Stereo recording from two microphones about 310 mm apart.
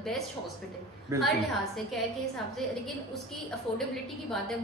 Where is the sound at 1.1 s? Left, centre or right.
Centre.